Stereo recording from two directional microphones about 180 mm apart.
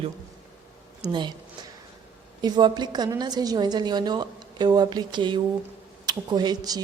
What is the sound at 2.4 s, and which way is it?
A woman's voice, 25° right (ahead or behind).